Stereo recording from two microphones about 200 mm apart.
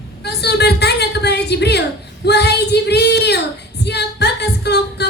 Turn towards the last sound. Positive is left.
turn(degrees=55)  # may be behind; listen again after turning